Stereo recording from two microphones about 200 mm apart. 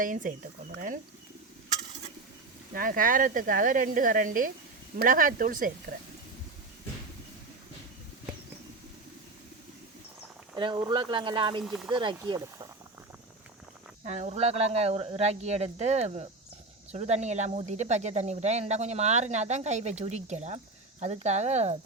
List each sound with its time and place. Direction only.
0.0 s speech: 40° right (ahead or behind)
2.7 s speech: 45° right (ahead or behind)
10.5 s speech: 25° right (ahead or behind)
11.6 s speech: centre (ahead or behind)
11.9 s speech: 25° right (ahead or behind)
14.0 s speech: 35° right (ahead or behind)